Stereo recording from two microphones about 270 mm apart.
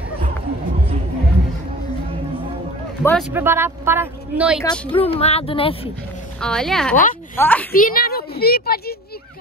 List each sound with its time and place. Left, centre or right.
3.0 s speech: centre
3.3 s speech: centre
4.6 s speech: centre
6.4 s a woman's voice: centre
7.7 s a child's voice: left